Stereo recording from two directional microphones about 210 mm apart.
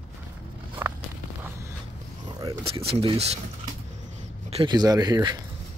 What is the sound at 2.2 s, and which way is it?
Speech, 25° right (ahead or behind).